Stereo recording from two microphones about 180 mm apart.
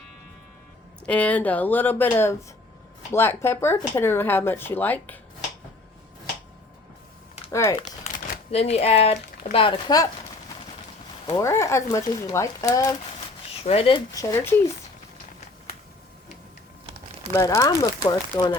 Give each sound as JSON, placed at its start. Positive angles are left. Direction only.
{"t": 1.0, "sound": "speech", "side_deg": 5}
{"t": 7.5, "sound": "speech", "side_deg": 15}
{"t": 7.8, "sound": "speech", "side_deg": 40}
{"t": 11.3, "sound": "speech", "side_deg": 15}
{"t": 13.6, "sound": "speech", "side_deg": 35}
{"t": 17.3, "sound": "speech", "side_deg": 20}